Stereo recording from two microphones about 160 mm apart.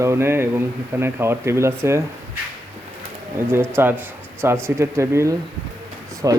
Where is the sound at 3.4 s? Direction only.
15° right (ahead or behind).